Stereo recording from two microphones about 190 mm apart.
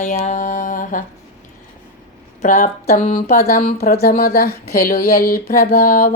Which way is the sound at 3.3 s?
55° left (ahead or behind).